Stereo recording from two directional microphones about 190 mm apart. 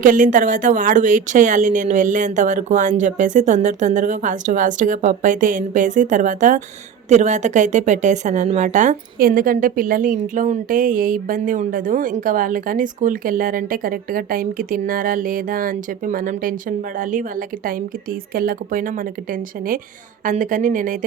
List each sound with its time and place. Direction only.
0.0 s a woman's voice: 45° right (ahead or behind)